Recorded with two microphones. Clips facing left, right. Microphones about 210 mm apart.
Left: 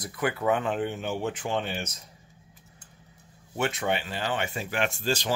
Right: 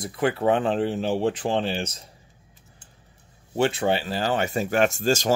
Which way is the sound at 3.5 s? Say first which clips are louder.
Right 6 dB; 30° right (ahead or behind).